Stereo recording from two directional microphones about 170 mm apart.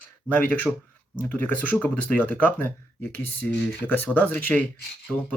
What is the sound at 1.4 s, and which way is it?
Speech, 10° left (ahead or behind).